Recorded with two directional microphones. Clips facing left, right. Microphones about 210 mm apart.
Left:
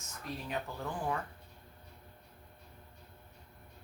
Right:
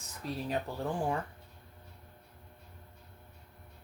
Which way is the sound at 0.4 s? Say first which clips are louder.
Right 5 dB; 35° right (ahead or behind).